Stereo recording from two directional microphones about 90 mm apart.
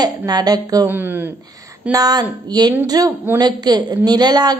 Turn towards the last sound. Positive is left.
turn(degrees=-50)  # may be behind; listen again after turning